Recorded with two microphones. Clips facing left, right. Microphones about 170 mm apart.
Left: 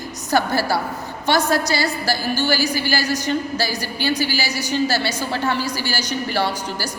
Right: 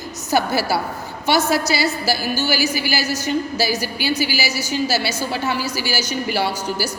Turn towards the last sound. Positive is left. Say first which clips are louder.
# right 1 dB
turn(degrees=-10)  # may be behind; listen again after turning